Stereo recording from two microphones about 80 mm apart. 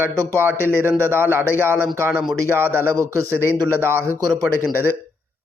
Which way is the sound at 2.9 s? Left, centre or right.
Right.